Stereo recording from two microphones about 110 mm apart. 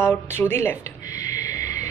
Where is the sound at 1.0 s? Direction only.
30° left (ahead or behind).